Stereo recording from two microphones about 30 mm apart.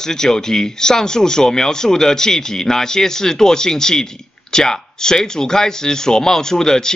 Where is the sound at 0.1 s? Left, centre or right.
Centre.